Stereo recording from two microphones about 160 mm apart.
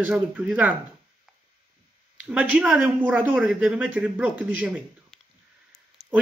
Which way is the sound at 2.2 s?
5° right (ahead or behind).